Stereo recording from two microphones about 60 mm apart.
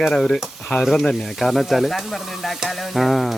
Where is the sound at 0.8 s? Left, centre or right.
Centre.